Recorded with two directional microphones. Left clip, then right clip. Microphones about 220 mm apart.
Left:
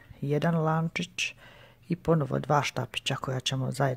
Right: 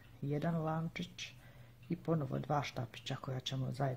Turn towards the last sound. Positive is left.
turn(degrees=40)  # may be behind; listen again after turning